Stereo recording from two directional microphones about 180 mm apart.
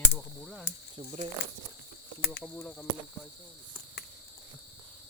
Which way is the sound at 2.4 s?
5° left (ahead or behind).